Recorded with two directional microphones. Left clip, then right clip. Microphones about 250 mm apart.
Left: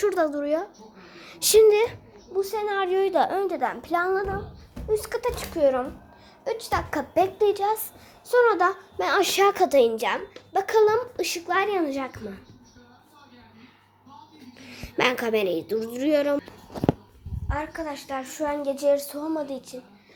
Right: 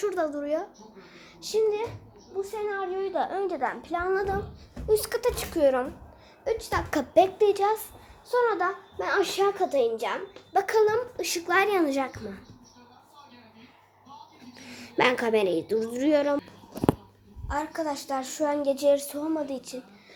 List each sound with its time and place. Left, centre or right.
0.0 s a woman's voice: centre
1.4 s a child's voice: left; by 4.1 s centre
4.9 s a woman's voice: centre
6.4 s a woman's voice: centre
6.9 s a woman's voice: centre
8.3 s a child's voice: centre
10.5 s a woman's voice: centre
14.6 s a woman's voice: centre
17.5 s a woman's voice: centre